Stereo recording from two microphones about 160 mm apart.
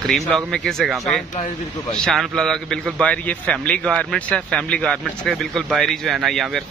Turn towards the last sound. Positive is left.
turn(degrees=0)  # may be behind; listen again after turning